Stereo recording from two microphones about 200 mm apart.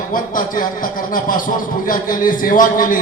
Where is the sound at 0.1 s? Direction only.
40° left (ahead or behind).